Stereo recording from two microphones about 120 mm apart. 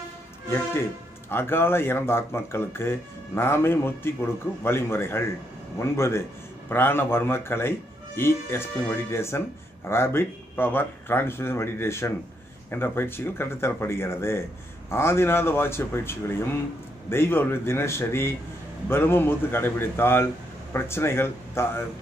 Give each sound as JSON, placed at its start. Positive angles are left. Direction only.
{"t": 1.3, "sound": "speech", "side_deg": 20}